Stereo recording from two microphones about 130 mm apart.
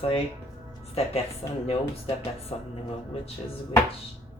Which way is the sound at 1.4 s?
50° left (ahead or behind).